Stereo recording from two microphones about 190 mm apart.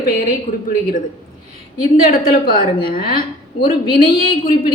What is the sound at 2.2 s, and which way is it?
A woman's voice, 50° left (ahead or behind).